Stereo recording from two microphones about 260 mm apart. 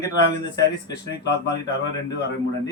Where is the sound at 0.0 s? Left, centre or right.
Centre.